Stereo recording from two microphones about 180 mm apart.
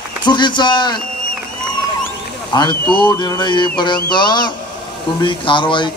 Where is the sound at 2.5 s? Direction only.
25° left (ahead or behind).